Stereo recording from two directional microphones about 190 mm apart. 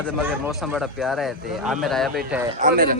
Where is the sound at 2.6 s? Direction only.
45° right (ahead or behind).